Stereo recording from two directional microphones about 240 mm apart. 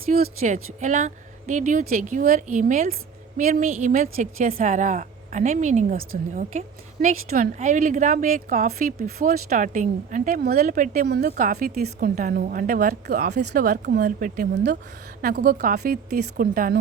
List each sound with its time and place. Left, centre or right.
0.2 s a woman's voice: right